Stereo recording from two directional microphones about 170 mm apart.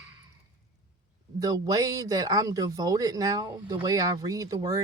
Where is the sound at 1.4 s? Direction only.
20° right (ahead or behind).